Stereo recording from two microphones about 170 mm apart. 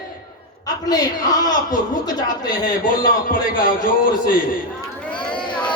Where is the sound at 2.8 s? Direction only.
55° left (ahead or behind).